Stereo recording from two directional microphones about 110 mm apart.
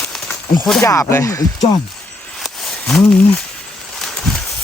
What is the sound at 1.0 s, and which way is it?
Speech, 25° left (ahead or behind).